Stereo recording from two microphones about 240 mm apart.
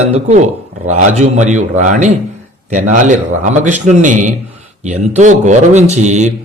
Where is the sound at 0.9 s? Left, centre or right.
Right.